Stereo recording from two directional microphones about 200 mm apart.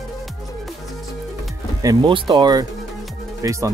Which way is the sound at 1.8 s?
20° right (ahead or behind).